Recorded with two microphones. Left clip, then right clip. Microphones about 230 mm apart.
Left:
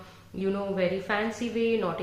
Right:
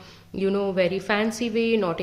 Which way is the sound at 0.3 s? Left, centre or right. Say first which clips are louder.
Right 6 dB; right.